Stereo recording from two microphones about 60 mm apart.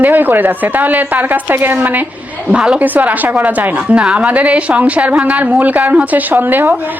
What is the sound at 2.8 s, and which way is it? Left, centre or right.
A woman's voice, right.